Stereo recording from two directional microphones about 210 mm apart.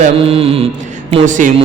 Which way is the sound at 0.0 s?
30° right (ahead or behind).